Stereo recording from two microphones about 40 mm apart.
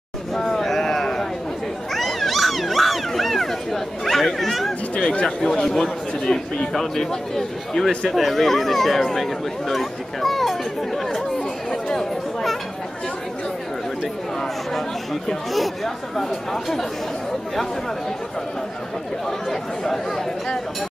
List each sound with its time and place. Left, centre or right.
0.3 s a sound: centre
4.9 s speech: left
5.4 s a man's voice: centre
11.1 s chatter: centre
15.5 s speech: centre
19.5 s a man's voice: centre